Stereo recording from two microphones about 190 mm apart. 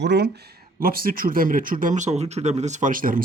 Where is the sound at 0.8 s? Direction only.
50° right (ahead or behind).